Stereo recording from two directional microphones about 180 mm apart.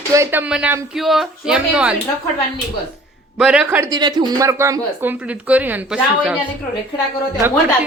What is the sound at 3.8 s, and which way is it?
Speech, 25° right (ahead or behind).